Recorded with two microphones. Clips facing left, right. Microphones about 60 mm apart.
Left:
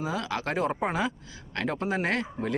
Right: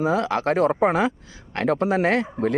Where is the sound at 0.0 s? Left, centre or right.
Right.